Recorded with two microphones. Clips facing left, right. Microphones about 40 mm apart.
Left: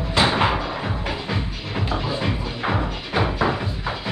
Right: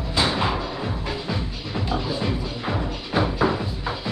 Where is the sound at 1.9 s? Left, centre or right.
Left.